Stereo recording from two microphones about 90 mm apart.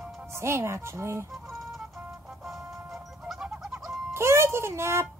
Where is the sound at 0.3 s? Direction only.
30° right (ahead or behind).